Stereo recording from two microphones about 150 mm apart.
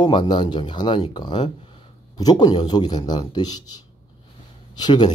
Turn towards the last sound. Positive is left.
turn(degrees=30)  # may be behind; listen again after turning